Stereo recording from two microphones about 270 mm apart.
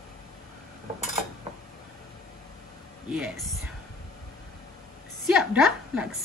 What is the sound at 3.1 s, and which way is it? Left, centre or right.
Speech, centre.